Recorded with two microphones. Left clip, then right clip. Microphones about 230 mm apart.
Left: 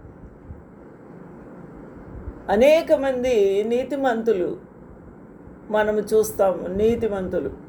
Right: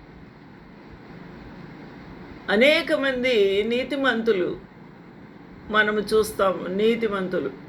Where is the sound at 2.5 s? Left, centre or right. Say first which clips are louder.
Left 3 dB; centre.